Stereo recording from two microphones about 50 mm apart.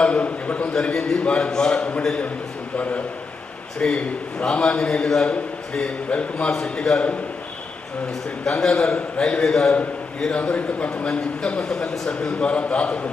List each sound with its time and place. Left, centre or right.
0.0 s a sound: left
0.7 s a man's voice: centre
3.8 s a man's voice: left
8.4 s a man's voice: centre